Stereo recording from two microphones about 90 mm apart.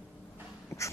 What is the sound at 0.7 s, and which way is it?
Dog, 35° left (ahead or behind).